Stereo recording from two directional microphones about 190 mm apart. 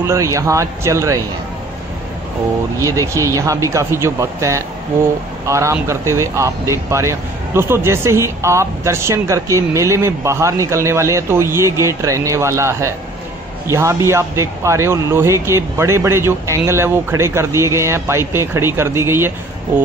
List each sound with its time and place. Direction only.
0.0 s speech: 15° right (ahead or behind)
2.8 s speech: 15° right (ahead or behind)